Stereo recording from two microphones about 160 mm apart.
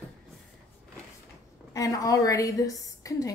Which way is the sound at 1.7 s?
20° left (ahead or behind).